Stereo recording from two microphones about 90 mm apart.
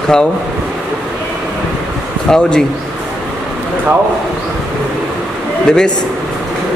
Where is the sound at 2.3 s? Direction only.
5° left (ahead or behind).